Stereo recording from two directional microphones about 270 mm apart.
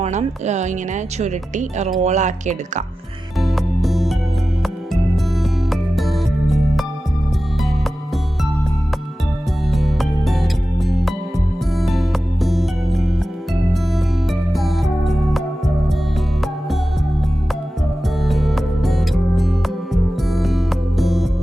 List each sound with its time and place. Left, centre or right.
0.0 s a woman's voice: right
3.4 s music: centre
9.7 s music: centre
14.5 s music: centre
18.2 s music: centre